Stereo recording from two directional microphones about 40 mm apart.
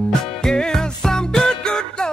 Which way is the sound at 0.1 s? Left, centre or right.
Centre.